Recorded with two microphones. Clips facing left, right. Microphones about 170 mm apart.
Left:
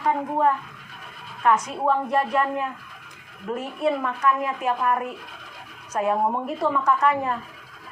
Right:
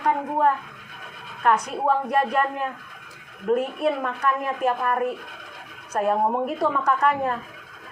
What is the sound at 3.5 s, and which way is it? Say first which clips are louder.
A woman's voice: right 3 dB; 60° right (ahead or behind).